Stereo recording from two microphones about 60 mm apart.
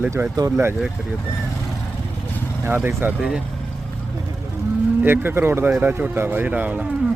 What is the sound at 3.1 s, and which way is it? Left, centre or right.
Speech, centre.